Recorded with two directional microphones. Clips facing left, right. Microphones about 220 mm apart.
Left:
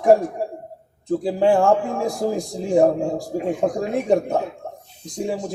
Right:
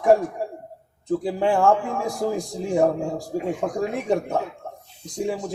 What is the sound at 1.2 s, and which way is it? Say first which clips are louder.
Speech: left 3 dB; 35° left (ahead or behind).